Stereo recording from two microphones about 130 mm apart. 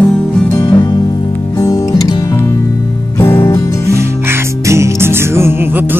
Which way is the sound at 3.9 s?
20° right (ahead or behind).